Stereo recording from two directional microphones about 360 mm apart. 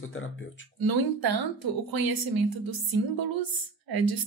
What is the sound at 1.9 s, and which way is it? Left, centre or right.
A woman's voice, right.